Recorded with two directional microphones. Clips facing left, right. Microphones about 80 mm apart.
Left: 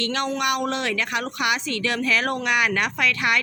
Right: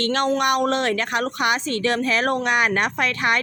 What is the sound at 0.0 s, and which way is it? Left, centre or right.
A woman's voice, right.